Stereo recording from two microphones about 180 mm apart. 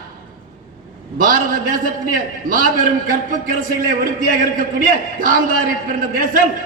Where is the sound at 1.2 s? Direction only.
50° right (ahead or behind).